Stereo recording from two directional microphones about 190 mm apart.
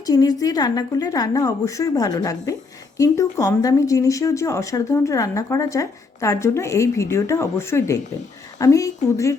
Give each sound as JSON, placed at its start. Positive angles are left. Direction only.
{"t": 0.0, "sound": "a woman's voice", "side_deg": 20}